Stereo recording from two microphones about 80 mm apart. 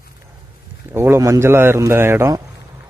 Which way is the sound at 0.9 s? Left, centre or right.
Right.